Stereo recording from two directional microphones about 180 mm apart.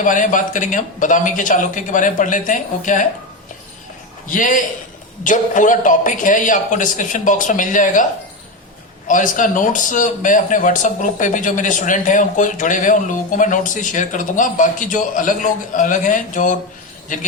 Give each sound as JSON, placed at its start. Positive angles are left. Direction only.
{"t": 0.0, "sound": "a man's voice", "side_deg": 45}
{"t": 4.3, "sound": "a man's voice", "side_deg": 45}
{"t": 9.0, "sound": "a man's voice", "side_deg": 45}